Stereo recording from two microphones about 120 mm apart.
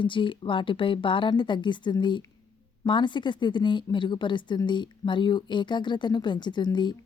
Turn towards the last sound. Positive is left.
turn(degrees=40)  # may be behind; listen again after turning